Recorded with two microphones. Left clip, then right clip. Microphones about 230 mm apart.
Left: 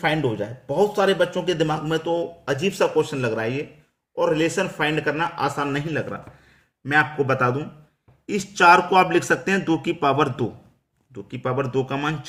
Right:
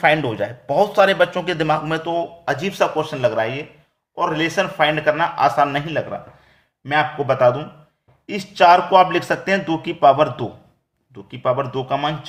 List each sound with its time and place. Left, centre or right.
0.0 s a man's voice: centre; by 12.1 s left